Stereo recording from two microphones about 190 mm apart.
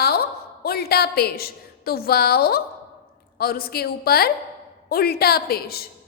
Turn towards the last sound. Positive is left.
turn(degrees=55)  # may be behind; listen again after turning